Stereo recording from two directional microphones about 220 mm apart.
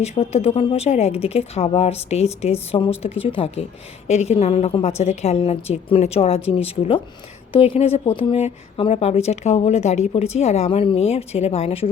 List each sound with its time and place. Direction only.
0.0 s speech: 30° left (ahead or behind)